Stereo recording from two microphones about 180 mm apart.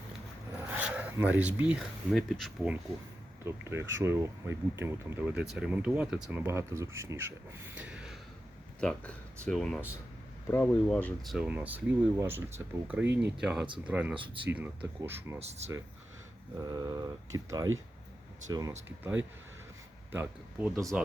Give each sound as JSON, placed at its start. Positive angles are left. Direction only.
{"t": 0.7, "sound": "speech", "side_deg": -10}
{"t": 3.4, "sound": "speech", "side_deg": -15}
{"t": 15.4, "sound": "speech", "side_deg": -35}
{"t": 16.6, "sound": "speech", "side_deg": -20}
{"t": 20.1, "sound": "speech", "side_deg": -10}